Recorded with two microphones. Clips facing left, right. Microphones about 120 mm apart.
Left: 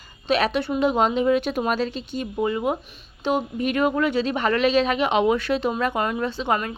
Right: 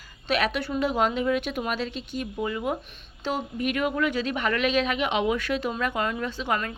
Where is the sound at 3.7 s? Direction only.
35° left (ahead or behind).